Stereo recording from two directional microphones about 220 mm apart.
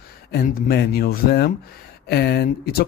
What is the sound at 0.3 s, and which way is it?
Speech, 45° left (ahead or behind).